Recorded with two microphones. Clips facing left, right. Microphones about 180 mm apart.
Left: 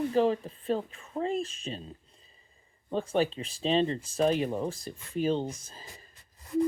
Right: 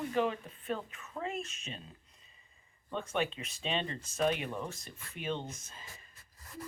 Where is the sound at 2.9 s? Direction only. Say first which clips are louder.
Left 7 dB; 35° left (ahead or behind).